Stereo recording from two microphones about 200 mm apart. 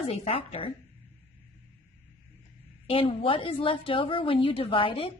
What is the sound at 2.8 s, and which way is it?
A woman's voice, 30° left (ahead or behind).